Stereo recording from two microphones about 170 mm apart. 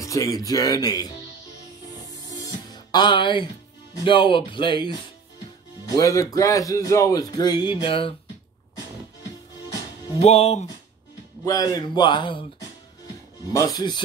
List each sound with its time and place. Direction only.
0.0 s speech: 20° left (ahead or behind)
2.4 s music: 25° left (ahead or behind)
3.9 s speech: 30° left (ahead or behind)
10.2 s speech: 40° left (ahead or behind)
11.4 s speech: 20° left (ahead or behind)